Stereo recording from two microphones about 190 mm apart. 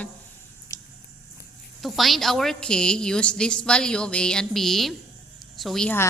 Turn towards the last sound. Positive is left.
turn(degrees=5)  # may be behind; listen again after turning